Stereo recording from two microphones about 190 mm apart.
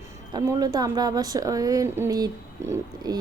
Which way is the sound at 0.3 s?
20° right (ahead or behind).